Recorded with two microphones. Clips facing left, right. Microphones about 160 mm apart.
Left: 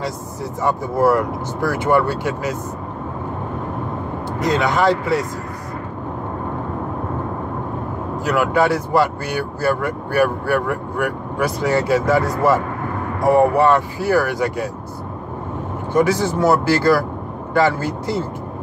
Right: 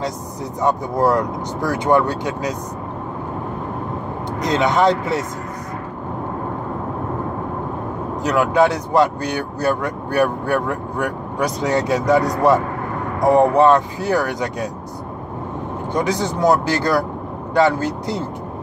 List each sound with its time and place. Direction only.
0.6 s speech: 20° right (ahead or behind)
4.4 s speech: 20° right (ahead or behind)
8.2 s speech: 20° right (ahead or behind)
15.9 s speech: 15° right (ahead or behind)